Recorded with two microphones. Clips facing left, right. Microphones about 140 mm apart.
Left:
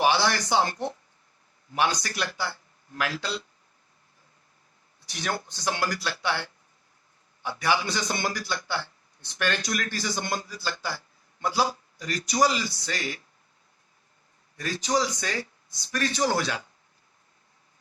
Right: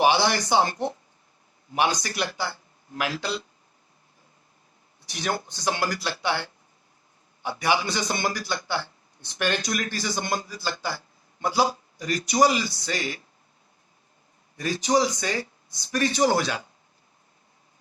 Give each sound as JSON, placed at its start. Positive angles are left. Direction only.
{"t": 0.0, "sound": "speech", "side_deg": -15}
{"t": 5.0, "sound": "a man's voice", "side_deg": -15}
{"t": 14.5, "sound": "speech", "side_deg": -15}